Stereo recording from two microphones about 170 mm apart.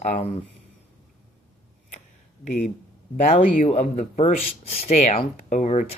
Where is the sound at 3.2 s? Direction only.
40° left (ahead or behind).